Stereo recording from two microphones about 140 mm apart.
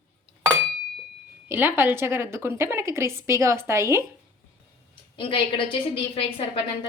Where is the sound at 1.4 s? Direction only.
15° right (ahead or behind).